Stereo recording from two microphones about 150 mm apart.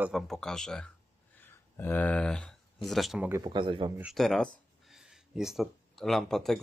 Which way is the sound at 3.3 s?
30° right (ahead or behind).